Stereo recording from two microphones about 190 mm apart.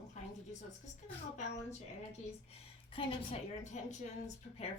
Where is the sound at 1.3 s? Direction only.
35° left (ahead or behind).